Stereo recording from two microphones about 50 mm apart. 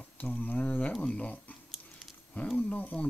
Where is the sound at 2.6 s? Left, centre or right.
Left.